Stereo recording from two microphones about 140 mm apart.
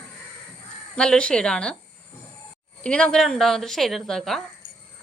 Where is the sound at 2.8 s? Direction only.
5° left (ahead or behind).